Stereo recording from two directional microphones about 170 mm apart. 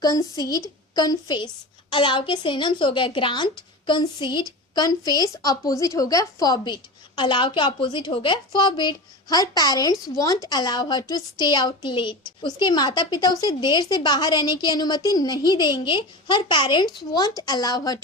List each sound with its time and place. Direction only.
0.0 s a woman's voice: 20° left (ahead or behind)